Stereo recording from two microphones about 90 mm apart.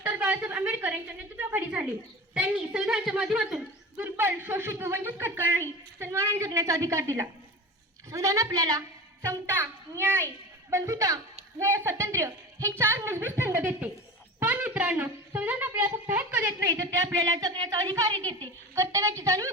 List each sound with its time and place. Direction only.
0.0 s a sound: 15° right (ahead or behind)
1.4 s a woman's voice: 15° right (ahead or behind)
3.9 s a woman's voice: 25° right (ahead or behind); by 8.8 s 40° right (ahead or behind)
9.2 s a woman's voice: 25° right (ahead or behind)
16.7 s a woman's voice: 35° right (ahead or behind)
17.3 s speech: 55° right (ahead or behind)
18.7 s a woman's voice: 35° right (ahead or behind)